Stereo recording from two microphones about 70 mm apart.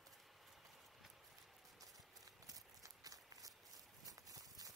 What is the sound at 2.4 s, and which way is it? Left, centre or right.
Horse, right.